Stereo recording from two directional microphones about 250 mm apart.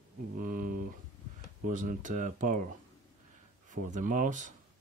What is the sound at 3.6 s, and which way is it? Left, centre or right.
Speech, right.